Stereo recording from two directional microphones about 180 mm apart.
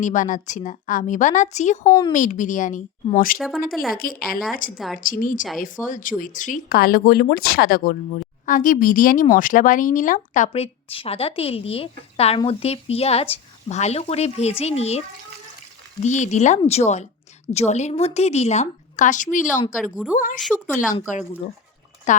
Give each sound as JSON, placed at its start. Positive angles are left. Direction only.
{"t": 0.0, "sound": "speech", "side_deg": 45}
{"t": 1.8, "sound": "speech", "side_deg": 20}
{"t": 2.1, "sound": "speech", "side_deg": 45}
{"t": 3.3, "sound": "speech", "side_deg": 0}
{"t": 3.9, "sound": "speech", "side_deg": 55}
{"t": 16.0, "sound": "speech", "side_deg": 40}
{"t": 19.8, "sound": "a woman's voice", "side_deg": -5}
{"t": 20.1, "sound": "speech", "side_deg": 45}
{"t": 20.4, "sound": "speech", "side_deg": 5}
{"t": 21.1, "sound": "speech", "side_deg": 40}